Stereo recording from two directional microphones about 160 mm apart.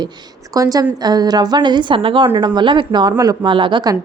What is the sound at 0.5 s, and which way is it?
A woman's voice, 20° right (ahead or behind).